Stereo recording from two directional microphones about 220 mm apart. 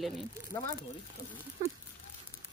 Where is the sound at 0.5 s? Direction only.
25° left (ahead or behind).